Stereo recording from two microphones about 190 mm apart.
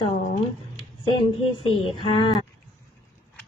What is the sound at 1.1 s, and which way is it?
A woman's voice, 25° left (ahead or behind).